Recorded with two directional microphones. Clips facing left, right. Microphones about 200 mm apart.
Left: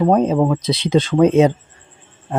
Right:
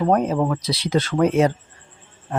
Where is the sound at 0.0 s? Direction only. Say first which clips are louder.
Left 4 dB; 20° left (ahead or behind).